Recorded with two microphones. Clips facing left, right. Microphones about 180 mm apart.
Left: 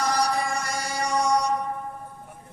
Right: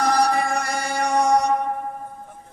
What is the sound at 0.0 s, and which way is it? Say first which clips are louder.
Music: right 5 dB; 55° right (ahead or behind).